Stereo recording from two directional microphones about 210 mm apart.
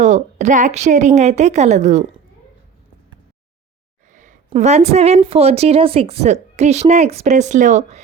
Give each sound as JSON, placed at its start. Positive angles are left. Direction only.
{"t": 0.0, "sound": "a woman's voice", "side_deg": -35}
{"t": 4.1, "sound": "a sound", "side_deg": -35}
{"t": 4.4, "sound": "a woman's voice", "side_deg": -35}